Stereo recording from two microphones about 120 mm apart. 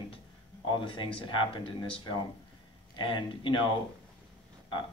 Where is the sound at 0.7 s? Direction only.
45° left (ahead or behind).